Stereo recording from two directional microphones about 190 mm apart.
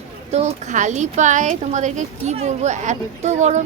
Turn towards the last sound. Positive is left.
turn(degrees=-35)  # may be behind; listen again after turning